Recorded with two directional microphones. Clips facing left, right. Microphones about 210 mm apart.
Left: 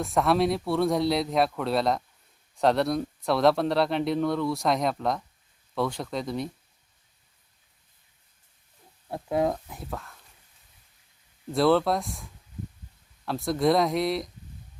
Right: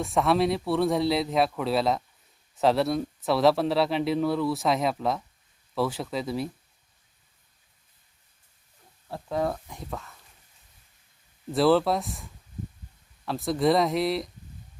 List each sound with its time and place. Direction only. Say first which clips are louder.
0.0 s speech: even; centre (ahead or behind)
9.0 s speech: left 2 dB; 20° left (ahead or behind)
9.6 s speech: even; 5° left (ahead or behind)
11.5 s speech: right 1 dB; centre (ahead or behind)